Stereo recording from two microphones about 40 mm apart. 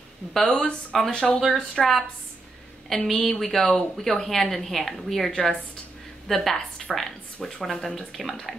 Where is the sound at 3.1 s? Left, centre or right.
Centre.